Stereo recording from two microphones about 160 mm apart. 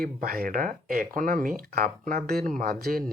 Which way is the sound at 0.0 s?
65° right (ahead or behind).